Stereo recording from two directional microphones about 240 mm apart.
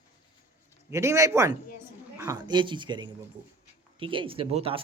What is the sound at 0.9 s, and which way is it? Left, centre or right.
A woman's voice, centre.